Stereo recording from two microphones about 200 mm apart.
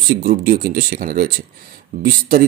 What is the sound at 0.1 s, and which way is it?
Speech, 50° right (ahead or behind).